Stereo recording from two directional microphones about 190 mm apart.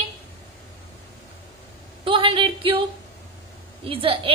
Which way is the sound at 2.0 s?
25° right (ahead or behind).